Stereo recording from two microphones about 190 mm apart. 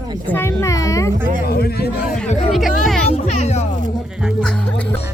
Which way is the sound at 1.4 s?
55° left (ahead or behind).